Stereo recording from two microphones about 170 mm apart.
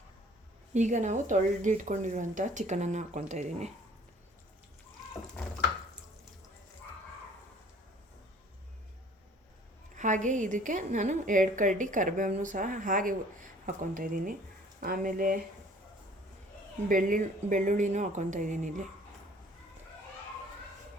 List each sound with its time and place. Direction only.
0.7 s a woman's voice: 45° right (ahead or behind)
9.9 s a woman's voice: 45° right (ahead or behind)
16.9 s a woman's voice: 50° right (ahead or behind)